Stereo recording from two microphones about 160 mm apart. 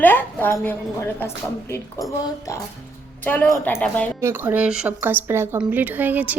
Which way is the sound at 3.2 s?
10° left (ahead or behind).